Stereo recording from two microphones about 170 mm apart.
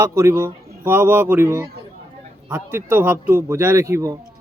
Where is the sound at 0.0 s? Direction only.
15° right (ahead or behind).